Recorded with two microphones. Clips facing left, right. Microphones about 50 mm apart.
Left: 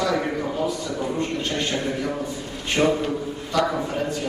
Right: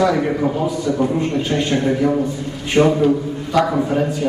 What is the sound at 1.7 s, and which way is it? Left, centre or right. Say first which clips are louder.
A man's voice: right 9 dB; centre.